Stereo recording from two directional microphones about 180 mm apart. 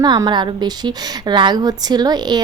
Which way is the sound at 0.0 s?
25° right (ahead or behind).